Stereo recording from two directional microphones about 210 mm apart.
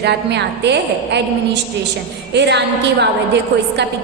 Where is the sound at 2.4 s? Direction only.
55° right (ahead or behind).